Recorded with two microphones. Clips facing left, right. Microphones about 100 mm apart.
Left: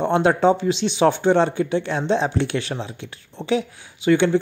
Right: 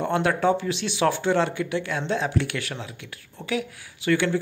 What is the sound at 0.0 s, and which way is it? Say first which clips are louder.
Speech: left 5 dB; 25° left (ahead or behind).